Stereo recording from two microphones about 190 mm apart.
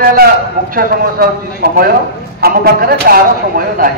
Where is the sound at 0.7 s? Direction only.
55° right (ahead or behind).